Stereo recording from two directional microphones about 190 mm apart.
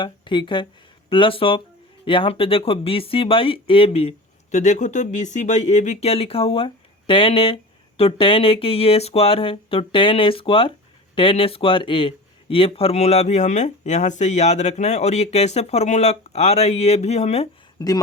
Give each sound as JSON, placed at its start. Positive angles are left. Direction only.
{"t": 0.0, "sound": "speech", "side_deg": 25}
{"t": 17.7, "sound": "speech", "side_deg": 20}